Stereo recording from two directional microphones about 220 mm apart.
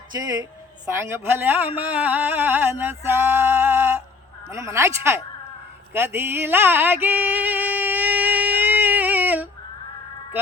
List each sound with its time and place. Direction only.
0.1 s a woman's voice: 15° right (ahead or behind)
5.9 s music: 10° right (ahead or behind)